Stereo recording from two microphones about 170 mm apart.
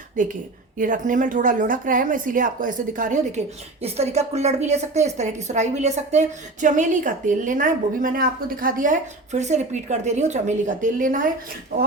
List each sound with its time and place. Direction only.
0.2 s speech: 50° right (ahead or behind)